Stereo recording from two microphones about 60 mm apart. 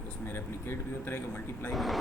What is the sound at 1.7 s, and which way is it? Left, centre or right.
Speech, centre.